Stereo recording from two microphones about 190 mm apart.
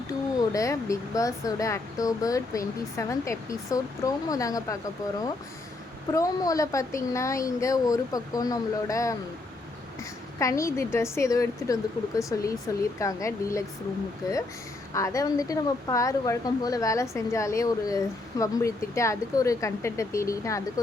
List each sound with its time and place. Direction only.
0.1 s speech: 15° left (ahead or behind)
6.1 s speech: 20° left (ahead or behind)